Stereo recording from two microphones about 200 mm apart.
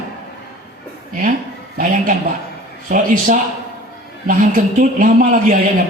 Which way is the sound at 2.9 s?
40° right (ahead or behind).